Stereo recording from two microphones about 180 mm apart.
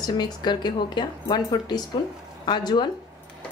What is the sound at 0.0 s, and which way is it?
Speech, 20° left (ahead or behind).